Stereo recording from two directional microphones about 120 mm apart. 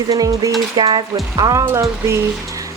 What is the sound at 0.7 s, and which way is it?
Speech, 40° right (ahead or behind).